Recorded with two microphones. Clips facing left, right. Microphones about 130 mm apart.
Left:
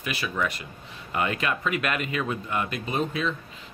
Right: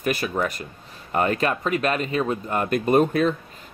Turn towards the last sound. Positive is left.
turn(degrees=-50)  # may be behind; listen again after turning